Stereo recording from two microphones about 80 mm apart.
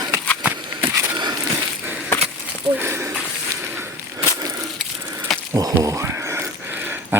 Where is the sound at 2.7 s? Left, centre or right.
Right.